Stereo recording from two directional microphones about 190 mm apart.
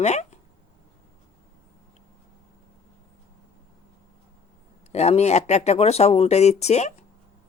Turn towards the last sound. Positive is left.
turn(degrees=35)  # may be behind; listen again after turning